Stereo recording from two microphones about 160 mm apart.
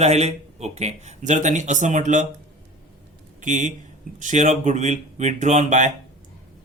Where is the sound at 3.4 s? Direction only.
50° right (ahead or behind).